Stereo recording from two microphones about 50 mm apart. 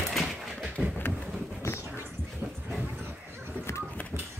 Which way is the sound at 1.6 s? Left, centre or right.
Left.